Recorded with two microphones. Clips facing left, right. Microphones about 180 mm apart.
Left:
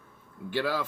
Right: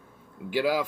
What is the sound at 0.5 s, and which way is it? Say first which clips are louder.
Speech: right 4 dB; 10° right (ahead or behind).